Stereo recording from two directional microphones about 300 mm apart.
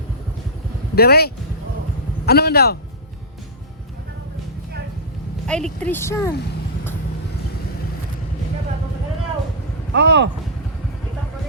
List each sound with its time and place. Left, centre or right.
0.9 s speech: left
5.5 s a woman's voice: centre
9.9 s speech: right